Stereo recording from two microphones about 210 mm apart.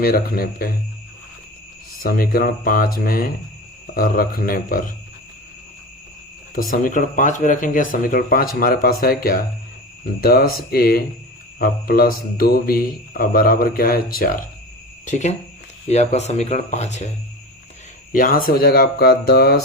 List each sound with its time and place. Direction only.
0.0 s speech: 45° left (ahead or behind)
2.0 s speech: 45° left (ahead or behind)
6.7 s speech: 40° left (ahead or behind)
18.1 s speech: 40° left (ahead or behind)